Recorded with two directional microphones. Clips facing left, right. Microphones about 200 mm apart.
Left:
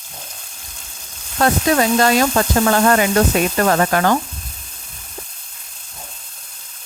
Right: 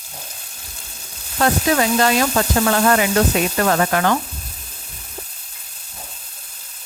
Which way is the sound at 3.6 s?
40° left (ahead or behind).